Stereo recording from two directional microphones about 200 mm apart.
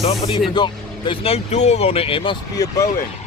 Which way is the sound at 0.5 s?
25° left (ahead or behind).